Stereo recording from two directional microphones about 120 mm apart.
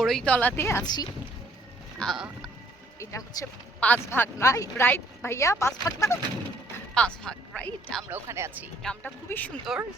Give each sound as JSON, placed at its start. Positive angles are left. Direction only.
{"t": 0.0, "sound": "a woman's voice", "side_deg": 0}
{"t": 2.0, "sound": "speech", "side_deg": 5}
{"t": 3.0, "sound": "speech", "side_deg": 25}
{"t": 3.8, "sound": "speech", "side_deg": 15}
{"t": 6.9, "sound": "a woman's voice", "side_deg": 10}
{"t": 8.1, "sound": "speech", "side_deg": -20}
{"t": 8.8, "sound": "a woman's voice", "side_deg": 5}
{"t": 9.7, "sound": "speech", "side_deg": 0}